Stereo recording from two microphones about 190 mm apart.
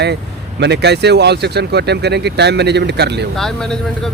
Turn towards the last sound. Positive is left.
turn(degrees=5)  # may be behind; listen again after turning